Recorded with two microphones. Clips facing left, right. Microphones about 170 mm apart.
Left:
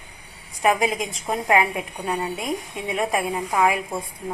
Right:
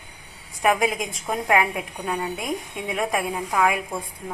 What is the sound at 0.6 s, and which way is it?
A woman's voice, centre (ahead or behind).